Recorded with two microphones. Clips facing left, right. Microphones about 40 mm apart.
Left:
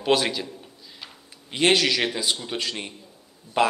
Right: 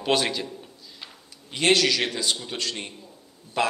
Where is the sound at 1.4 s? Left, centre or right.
Left.